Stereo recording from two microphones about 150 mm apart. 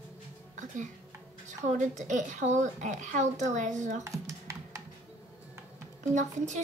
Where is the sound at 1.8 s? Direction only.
55° right (ahead or behind).